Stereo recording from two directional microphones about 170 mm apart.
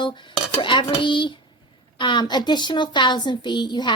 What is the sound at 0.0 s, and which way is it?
Cutlery, 30° left (ahead or behind).